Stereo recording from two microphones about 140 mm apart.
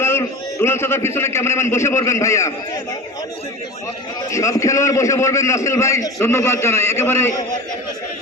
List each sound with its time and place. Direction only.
0.0 s a man's voice: 20° left (ahead or behind)
4.3 s a man's voice: 20° left (ahead or behind)